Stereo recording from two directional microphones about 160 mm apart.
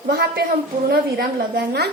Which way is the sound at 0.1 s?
80° right.